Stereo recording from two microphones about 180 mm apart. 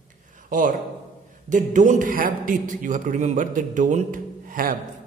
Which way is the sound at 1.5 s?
45° right (ahead or behind).